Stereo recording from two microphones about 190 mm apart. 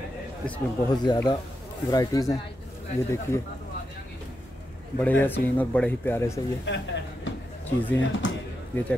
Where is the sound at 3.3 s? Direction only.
15° left (ahead or behind).